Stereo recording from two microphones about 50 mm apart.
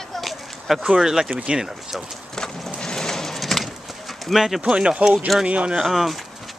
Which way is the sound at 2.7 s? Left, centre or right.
Centre.